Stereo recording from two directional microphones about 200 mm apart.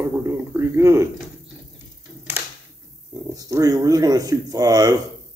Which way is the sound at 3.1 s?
20° right (ahead or behind).